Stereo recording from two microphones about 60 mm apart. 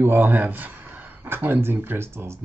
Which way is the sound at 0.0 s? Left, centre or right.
Right.